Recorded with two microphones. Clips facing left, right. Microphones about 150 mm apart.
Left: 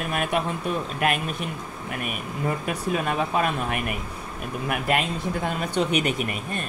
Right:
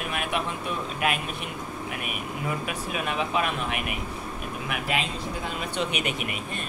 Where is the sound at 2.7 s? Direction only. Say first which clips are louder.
Left 5 dB; 40° left (ahead or behind).